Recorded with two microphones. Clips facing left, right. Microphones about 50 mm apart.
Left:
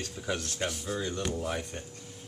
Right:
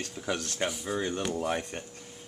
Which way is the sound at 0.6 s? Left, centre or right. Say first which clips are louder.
Right 4 dB; centre.